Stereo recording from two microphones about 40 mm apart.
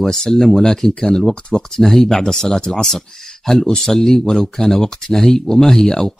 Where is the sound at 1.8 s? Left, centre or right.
Centre.